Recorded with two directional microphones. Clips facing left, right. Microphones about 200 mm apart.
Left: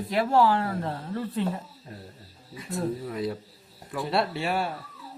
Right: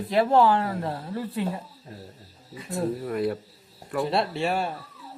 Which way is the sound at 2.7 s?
60° right (ahead or behind).